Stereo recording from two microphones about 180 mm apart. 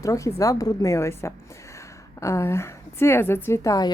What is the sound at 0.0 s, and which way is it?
A woman's voice, 15° left (ahead or behind).